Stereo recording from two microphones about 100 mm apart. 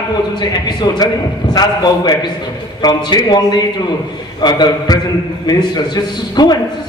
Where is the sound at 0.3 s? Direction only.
45° left (ahead or behind).